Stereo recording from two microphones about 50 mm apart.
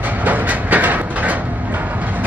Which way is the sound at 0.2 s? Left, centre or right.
Right.